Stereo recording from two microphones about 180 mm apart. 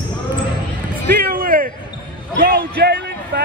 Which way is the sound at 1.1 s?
60° right (ahead or behind).